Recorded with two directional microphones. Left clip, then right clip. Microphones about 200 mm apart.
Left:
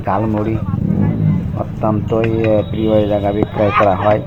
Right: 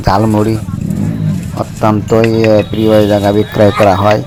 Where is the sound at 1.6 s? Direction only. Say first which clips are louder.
Right 7 dB; 35° right (ahead or behind).